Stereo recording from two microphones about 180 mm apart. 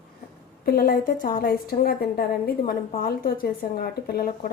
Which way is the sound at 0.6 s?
55° left (ahead or behind).